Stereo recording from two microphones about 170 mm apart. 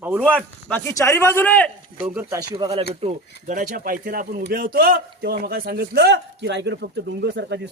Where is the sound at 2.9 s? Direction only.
40° right (ahead or behind).